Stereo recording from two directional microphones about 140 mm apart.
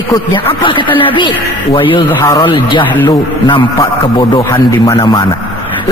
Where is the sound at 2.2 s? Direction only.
25° left (ahead or behind).